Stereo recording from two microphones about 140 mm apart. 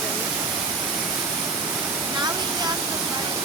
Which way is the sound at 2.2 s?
30° right (ahead or behind).